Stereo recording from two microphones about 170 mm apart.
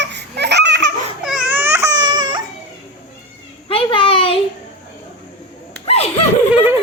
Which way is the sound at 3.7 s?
30° left (ahead or behind).